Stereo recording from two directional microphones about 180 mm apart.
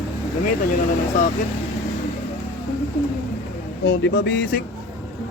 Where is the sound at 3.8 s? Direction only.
75° left (ahead or behind).